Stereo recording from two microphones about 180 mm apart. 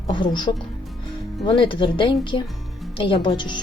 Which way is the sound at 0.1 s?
25° left (ahead or behind).